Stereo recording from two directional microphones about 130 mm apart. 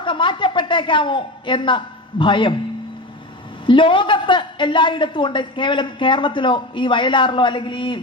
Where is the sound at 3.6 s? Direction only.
40° left (ahead or behind).